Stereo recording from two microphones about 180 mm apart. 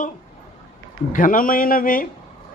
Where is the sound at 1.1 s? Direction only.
50° left (ahead or behind).